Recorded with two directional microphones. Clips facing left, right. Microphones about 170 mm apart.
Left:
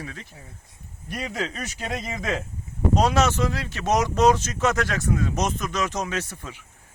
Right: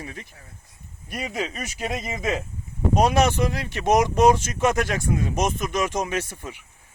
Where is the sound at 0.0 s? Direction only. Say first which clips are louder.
Even; 20° right (ahead or behind).